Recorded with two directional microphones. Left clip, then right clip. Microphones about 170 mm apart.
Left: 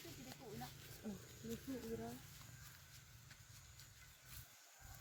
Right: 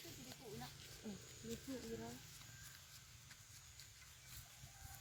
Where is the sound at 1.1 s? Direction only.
45° left (ahead or behind).